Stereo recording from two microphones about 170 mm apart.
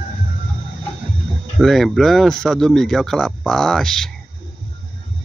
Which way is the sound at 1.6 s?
Centre (ahead or behind).